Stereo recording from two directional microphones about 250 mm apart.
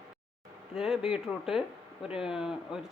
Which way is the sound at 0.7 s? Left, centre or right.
Centre.